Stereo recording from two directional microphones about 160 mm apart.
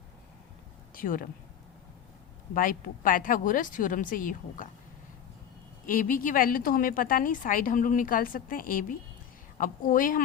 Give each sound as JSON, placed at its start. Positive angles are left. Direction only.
{"t": 0.9, "sound": "speech", "side_deg": 60}
{"t": 2.6, "sound": "a woman's voice", "side_deg": 60}
{"t": 5.8, "sound": "a woman's voice", "side_deg": 60}